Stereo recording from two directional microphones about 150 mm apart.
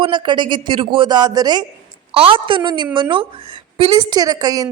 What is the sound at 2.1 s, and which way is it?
A woman's voice, 40° right (ahead or behind).